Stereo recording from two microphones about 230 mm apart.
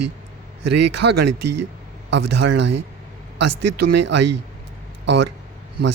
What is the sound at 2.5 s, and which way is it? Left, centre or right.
Speech, right.